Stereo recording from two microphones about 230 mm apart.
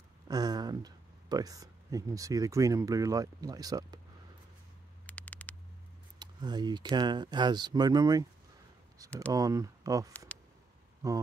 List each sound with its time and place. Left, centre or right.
0.3 s speech: centre
5.0 s a sound: centre
6.1 s speech: centre
9.3 s speech: centre
10.1 s a sound: centre
11.0 s speech: centre